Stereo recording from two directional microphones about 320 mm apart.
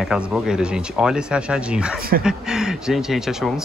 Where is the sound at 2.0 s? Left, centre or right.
Right.